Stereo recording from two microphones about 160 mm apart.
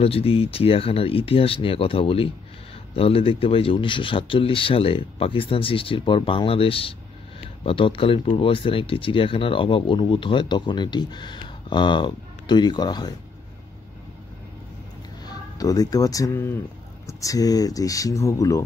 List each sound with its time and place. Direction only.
0.0 s speech: 35° left (ahead or behind)
15.2 s speech: 20° left (ahead or behind)